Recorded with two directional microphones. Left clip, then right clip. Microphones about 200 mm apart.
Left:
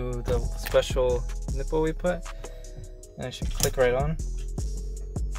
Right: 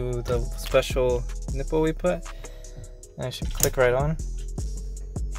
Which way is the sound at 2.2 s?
Centre (ahead or behind).